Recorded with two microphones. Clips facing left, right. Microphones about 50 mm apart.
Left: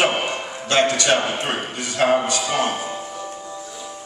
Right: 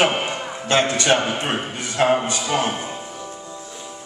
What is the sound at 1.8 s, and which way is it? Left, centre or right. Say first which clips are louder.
Speech: even; right.